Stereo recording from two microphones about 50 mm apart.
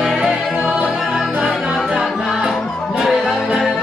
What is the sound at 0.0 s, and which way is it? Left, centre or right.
Music, centre.